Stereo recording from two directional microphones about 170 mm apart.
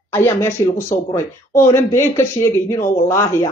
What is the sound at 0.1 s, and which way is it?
A woman's voice, 15° left (ahead or behind).